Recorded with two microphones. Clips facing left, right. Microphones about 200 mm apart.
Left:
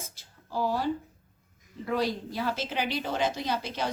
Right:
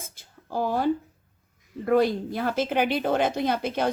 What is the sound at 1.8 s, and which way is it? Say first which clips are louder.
A woman's voice: right 8 dB; 55° right (ahead or behind).